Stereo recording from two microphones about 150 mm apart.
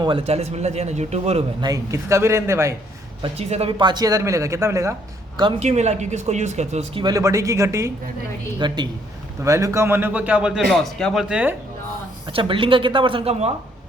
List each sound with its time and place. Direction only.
0.0 s a man's voice: 35° right (ahead or behind)
1.6 s speech: 20° right (ahead or behind)
3.2 s speech: 45° right (ahead or behind); by 4.9 s 20° right (ahead or behind)
5.5 s a man's voice: 50° right (ahead or behind)
7.0 s speech: 20° right (ahead or behind)
8.5 s a man's voice: 30° right (ahead or behind); by 10.6 s 5° right (ahead or behind)
10.7 s speech: 5° left (ahead or behind)
12.3 s speech: 35° right (ahead or behind)